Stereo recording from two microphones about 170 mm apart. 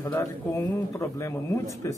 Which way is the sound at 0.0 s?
15° left (ahead or behind).